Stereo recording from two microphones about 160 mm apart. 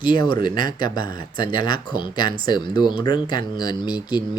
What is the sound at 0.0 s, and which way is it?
Speech, 30° left (ahead or behind).